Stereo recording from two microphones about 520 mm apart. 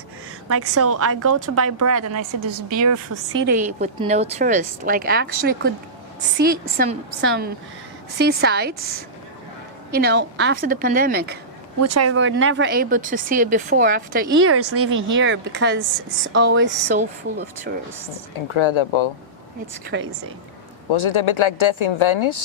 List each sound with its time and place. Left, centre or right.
0.4 s a woman's voice: right
6.3 s a woman's voice: centre
11.8 s speech: right
18.3 s speech: left
19.9 s speech: right
20.9 s speech: left